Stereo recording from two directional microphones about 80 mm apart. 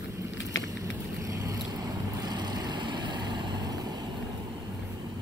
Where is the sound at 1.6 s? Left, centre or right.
Right.